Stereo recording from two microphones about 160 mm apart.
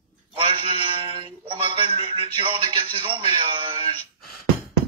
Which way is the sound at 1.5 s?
35° right (ahead or behind).